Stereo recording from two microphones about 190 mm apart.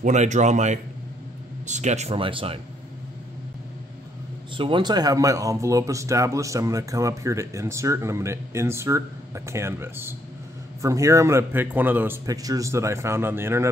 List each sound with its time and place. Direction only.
0.0 s speech: 40° right (ahead or behind)
4.6 s speech: 25° right (ahead or behind)